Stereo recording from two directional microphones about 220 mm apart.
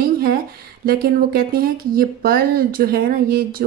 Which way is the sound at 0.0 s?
40° right (ahead or behind).